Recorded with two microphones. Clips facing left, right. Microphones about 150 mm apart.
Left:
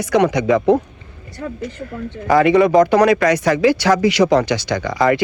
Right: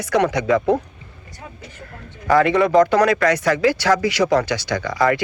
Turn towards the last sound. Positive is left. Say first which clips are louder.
# left 3 dB
turn(degrees=25)  # may be behind; listen again after turning